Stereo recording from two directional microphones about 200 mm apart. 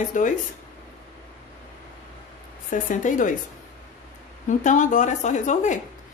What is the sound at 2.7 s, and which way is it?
Speech, 40° left (ahead or behind).